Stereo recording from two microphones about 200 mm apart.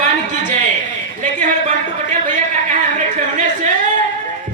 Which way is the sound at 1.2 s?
40° right (ahead or behind).